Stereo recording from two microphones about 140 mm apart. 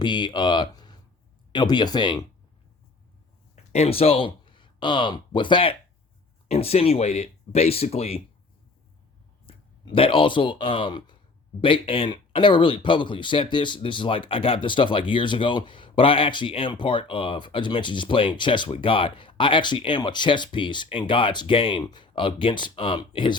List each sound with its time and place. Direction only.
0.0 s speech: 35° left (ahead or behind)
3.5 s speech: 50° left (ahead or behind)
9.5 s speech: 40° left (ahead or behind)